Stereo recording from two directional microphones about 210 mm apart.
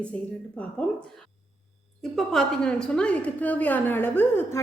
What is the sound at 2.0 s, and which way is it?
A woman's voice, centre (ahead or behind).